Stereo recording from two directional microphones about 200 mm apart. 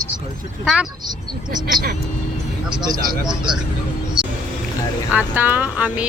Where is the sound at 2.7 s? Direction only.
20° right (ahead or behind).